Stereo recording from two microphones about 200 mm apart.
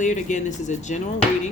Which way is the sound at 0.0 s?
35° left (ahead or behind).